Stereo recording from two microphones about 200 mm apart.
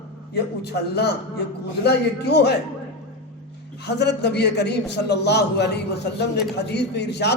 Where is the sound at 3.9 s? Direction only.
55° left (ahead or behind).